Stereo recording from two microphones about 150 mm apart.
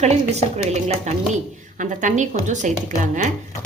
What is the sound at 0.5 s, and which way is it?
A woman's voice, 50° right (ahead or behind).